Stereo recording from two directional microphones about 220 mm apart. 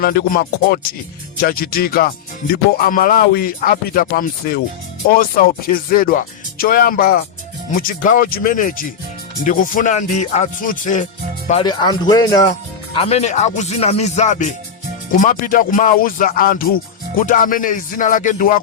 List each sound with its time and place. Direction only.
0.0 s speech: 45° left (ahead or behind)
11.6 s speech: 20° left (ahead or behind)
12.9 s speech: 25° left (ahead or behind)